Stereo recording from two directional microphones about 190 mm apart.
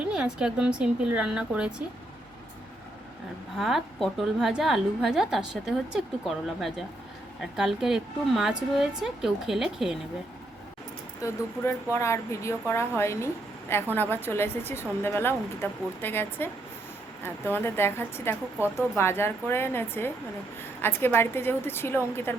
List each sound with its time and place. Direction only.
0.0 s a woman's voice: 5° right (ahead or behind)
3.6 s a woman's voice: centre (ahead or behind)
11.2 s a woman's voice: 15° left (ahead or behind)
17.5 s a woman's voice: 10° left (ahead or behind)